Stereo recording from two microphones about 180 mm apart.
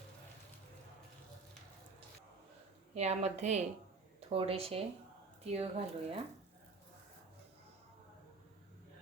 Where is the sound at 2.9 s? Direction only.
35° right (ahead or behind).